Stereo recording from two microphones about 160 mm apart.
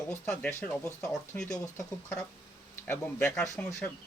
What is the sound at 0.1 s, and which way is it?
Speech, 15° left (ahead or behind).